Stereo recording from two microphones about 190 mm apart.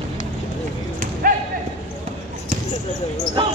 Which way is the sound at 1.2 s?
45° right (ahead or behind).